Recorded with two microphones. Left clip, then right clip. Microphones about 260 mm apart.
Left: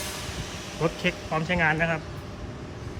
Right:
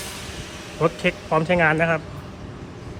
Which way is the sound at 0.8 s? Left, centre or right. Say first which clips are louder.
Right 6 dB; centre.